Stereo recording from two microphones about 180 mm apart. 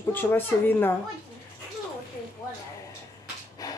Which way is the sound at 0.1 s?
10° left (ahead or behind).